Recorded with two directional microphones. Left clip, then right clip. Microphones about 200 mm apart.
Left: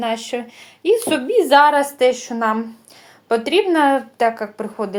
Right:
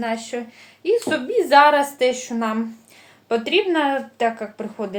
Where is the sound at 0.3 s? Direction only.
40° left (ahead or behind).